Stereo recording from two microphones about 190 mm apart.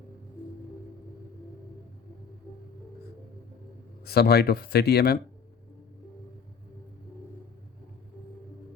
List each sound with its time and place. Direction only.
4.0 s speech: 55° left (ahead or behind)